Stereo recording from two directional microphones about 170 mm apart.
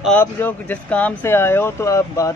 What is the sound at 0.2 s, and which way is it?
Speech, 10° left (ahead or behind).